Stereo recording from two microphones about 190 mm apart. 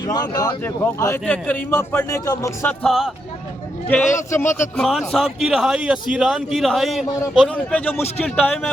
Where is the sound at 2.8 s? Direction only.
Centre (ahead or behind).